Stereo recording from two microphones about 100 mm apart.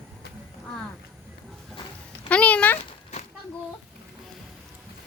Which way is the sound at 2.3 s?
10° left (ahead or behind).